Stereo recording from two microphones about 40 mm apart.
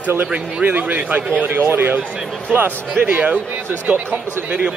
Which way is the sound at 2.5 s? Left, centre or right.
Right.